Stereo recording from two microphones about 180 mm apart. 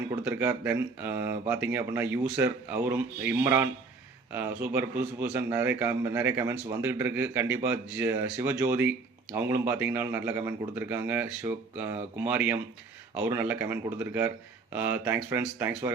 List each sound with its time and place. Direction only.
0.3 s speech: 10° right (ahead or behind)